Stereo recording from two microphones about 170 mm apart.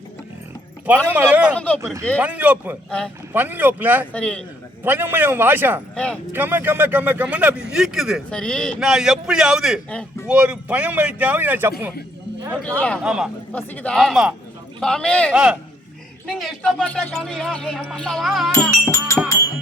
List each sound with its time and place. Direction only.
0.9 s speech: 10° right (ahead or behind)
1.5 s music: 10° left (ahead or behind)
1.8 s speech: 15° right (ahead or behind)
4.1 s music: 5° left (ahead or behind)
4.8 s speech: 10° right (ahead or behind)
5.9 s speech: 5° left (ahead or behind)
6.3 s speech: 10° right (ahead or behind)
13.0 s speech: 5° right (ahead or behind)
13.5 s speech: 10° left (ahead or behind)
15.3 s speech: 5° right (ahead or behind)
18.9 s music: 15° left (ahead or behind)